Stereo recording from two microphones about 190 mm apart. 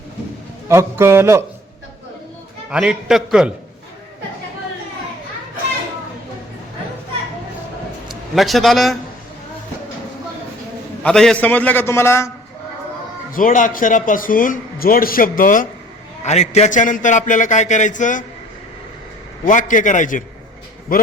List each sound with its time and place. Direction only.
0.7 s a man's voice: 15° right (ahead or behind)
2.6 s a man's voice: 5° right (ahead or behind)
8.0 s speech: centre (ahead or behind)
11.0 s a man's voice: 5° left (ahead or behind)
13.3 s a man's voice: 45° left (ahead or behind)
19.5 s speech: 45° left (ahead or behind)